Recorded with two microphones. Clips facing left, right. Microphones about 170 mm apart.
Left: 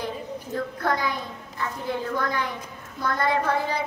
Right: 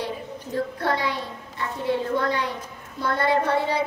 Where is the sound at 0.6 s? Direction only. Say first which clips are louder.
Right 2 dB; 30° right (ahead or behind).